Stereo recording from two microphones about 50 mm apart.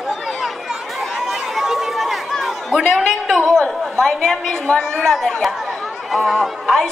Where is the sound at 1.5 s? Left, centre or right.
Centre.